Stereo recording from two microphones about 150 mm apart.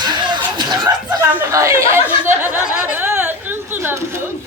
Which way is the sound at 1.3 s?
15° right (ahead or behind).